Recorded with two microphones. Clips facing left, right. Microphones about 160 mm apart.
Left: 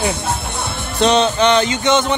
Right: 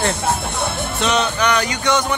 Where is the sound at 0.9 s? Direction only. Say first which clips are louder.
Left 7 dB; 30° left (ahead or behind).